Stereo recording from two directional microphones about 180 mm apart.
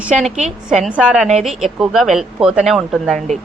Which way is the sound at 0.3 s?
40° right (ahead or behind).